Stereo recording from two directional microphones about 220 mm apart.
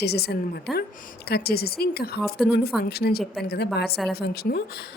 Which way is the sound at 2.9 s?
45° left (ahead or behind).